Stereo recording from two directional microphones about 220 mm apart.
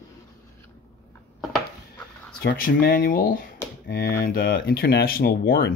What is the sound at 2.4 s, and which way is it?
Speech, 45° left (ahead or behind).